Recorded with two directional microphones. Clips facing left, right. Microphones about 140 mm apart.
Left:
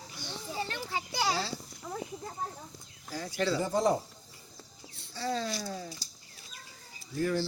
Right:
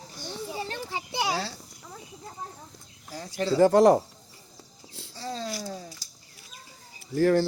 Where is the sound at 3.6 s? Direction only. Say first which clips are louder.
Right 13 dB; 75° right (ahead or behind).